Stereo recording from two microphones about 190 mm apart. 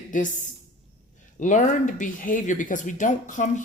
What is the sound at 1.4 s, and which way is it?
Speech, 40° left (ahead or behind).